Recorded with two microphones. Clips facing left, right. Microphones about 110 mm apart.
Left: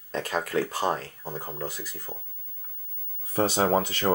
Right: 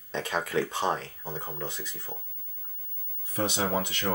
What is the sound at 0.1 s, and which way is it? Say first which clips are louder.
Speech: left 2 dB; centre (ahead or behind).